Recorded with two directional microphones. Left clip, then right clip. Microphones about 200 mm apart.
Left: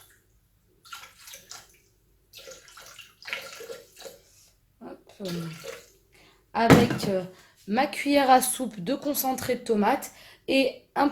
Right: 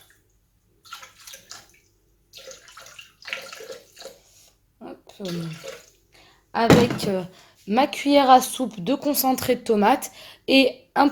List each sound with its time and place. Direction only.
4.8 s a sound: 45° right (ahead or behind)
6.5 s a woman's voice: 45° right (ahead or behind)
7.9 s a woman's voice: 20° right (ahead or behind); by 11.1 s 45° right (ahead or behind)